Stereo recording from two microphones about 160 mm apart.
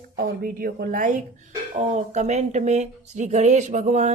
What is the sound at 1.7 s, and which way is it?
Speech, 45° right (ahead or behind).